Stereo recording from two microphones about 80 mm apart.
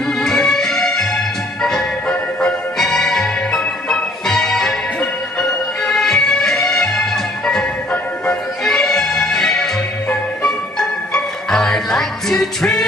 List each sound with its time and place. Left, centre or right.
0.2 s music: centre
8.6 s music: centre